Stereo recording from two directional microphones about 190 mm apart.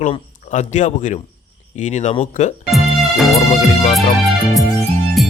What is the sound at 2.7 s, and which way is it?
Music, centre (ahead or behind).